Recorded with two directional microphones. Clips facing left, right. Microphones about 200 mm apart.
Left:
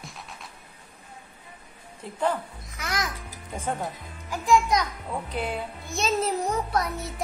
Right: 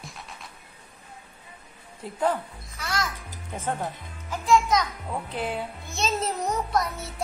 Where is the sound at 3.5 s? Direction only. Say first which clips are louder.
Even; centre (ahead or behind).